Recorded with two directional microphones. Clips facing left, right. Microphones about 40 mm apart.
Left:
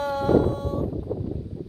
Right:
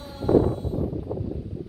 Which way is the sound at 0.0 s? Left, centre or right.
Left.